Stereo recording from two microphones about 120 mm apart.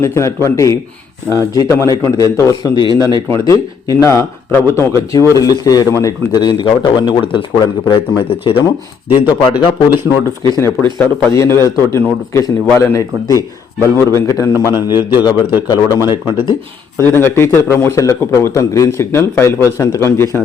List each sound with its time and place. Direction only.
0.0 s a man's voice: 25° left (ahead or behind); by 8.6 s 50° left (ahead or behind)
9.2 s a man's voice: 35° left (ahead or behind)
17.0 s a man's voice: 15° left (ahead or behind)